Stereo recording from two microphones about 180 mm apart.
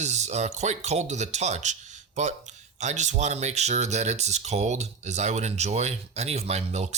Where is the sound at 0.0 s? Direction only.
40° right (ahead or behind).